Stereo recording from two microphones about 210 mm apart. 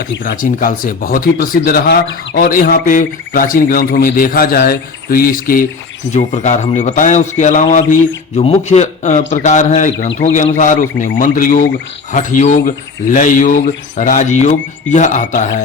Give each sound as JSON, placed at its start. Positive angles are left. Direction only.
{"t": 0.3, "sound": "speech", "side_deg": 40}